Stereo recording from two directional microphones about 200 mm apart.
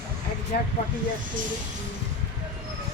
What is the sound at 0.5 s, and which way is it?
Speech, 50° left (ahead or behind).